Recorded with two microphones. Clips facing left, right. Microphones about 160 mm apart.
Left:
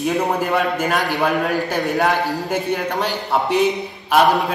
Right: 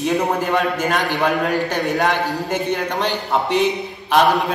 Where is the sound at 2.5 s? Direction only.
10° left (ahead or behind).